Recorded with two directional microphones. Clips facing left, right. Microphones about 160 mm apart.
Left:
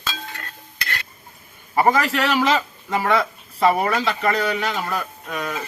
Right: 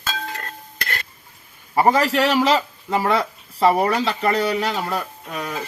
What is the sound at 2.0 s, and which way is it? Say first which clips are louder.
Speech: right 2 dB; 30° right (ahead or behind).